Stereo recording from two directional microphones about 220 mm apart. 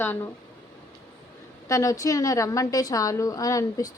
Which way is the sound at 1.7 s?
15° left (ahead or behind).